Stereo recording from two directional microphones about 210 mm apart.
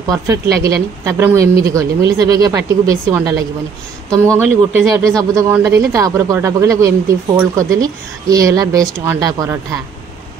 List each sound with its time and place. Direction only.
0.0 s speech: 15° right (ahead or behind)
4.7 s speech: 15° right (ahead or behind)